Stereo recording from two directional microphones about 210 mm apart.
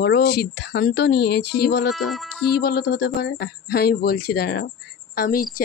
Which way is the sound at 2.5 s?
50° left (ahead or behind).